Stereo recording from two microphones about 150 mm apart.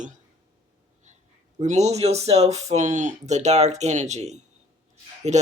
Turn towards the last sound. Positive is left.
turn(degrees=-45)  # may be behind; listen again after turning